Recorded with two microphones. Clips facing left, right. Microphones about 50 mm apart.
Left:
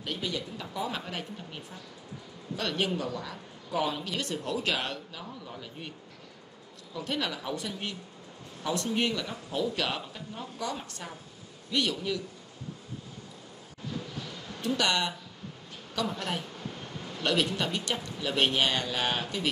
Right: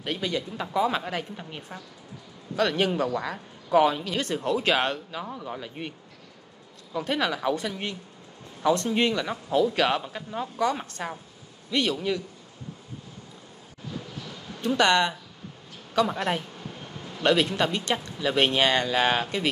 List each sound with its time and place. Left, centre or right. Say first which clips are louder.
0.0 s a woman's voice: right 5 dB; right
14.6 s speech: right 7 dB; right
16.5 s a sound: even; centre
17.2 s a woman's voice: right 6 dB; right